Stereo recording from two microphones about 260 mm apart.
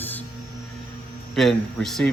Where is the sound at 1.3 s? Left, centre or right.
Centre.